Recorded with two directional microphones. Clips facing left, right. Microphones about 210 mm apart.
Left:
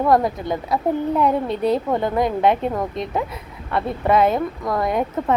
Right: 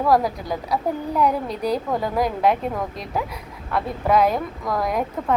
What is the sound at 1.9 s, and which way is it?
A woman's voice, centre (ahead or behind).